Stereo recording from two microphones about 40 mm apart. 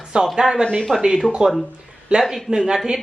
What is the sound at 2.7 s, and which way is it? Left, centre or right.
Dishes, centre.